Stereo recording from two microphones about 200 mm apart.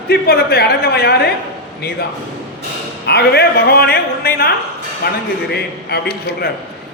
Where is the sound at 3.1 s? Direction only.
55° left (ahead or behind).